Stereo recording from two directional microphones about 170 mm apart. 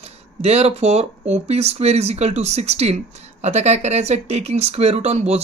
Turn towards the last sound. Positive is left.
turn(degrees=-40)  # may be behind; listen again after turning